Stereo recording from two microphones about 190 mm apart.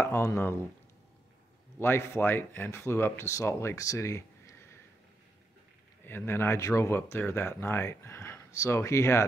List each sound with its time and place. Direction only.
0.0 s speech: 15° left (ahead or behind)
1.8 s speech: 10° left (ahead or behind)
6.0 s speech: 10° left (ahead or behind)